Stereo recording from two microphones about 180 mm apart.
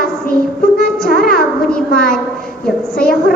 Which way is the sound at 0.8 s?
55° left (ahead or behind).